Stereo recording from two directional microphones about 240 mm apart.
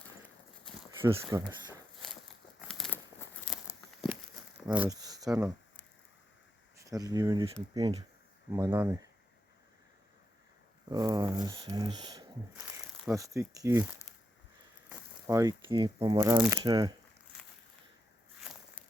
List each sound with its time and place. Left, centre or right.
0.9 s speech: centre
2.6 s crumpling: centre
4.6 s a sound: centre
5.3 s a sound: centre
6.7 s speech: centre
10.8 s speech: centre
14.1 s a sound: centre
14.8 s speech: centre
18.3 s walk: centre